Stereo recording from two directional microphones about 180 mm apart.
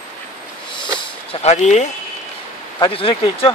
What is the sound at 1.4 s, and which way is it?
Speech, 40° left (ahead or behind).